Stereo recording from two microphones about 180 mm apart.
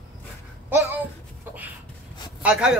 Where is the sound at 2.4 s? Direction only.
5° right (ahead or behind).